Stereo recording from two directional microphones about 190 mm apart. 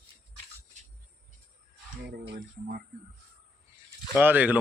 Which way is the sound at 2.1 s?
55° right (ahead or behind).